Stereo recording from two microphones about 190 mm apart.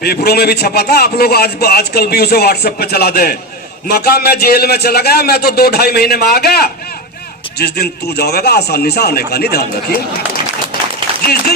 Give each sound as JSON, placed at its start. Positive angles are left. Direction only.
{"t": 0.3, "sound": "a man's voice", "side_deg": 55}